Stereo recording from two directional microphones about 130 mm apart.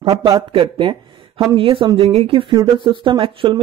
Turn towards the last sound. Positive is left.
turn(degrees=-40)  # may be behind; listen again after turning